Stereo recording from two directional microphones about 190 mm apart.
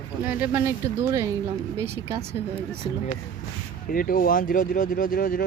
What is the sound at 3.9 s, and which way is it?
A man's voice, 50° left (ahead or behind).